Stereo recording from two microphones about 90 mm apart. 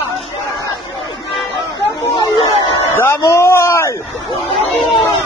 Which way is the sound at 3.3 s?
30° left (ahead or behind).